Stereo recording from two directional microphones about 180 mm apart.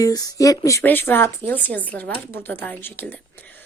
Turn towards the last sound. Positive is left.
turn(degrees=10)  # may be behind; listen again after turning